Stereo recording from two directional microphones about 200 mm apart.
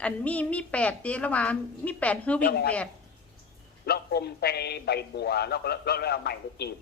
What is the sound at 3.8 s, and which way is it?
A man's voice, 55° left (ahead or behind).